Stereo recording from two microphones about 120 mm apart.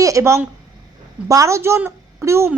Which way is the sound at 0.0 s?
25° right (ahead or behind).